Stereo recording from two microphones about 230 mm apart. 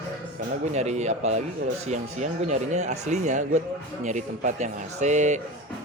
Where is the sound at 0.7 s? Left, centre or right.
Right.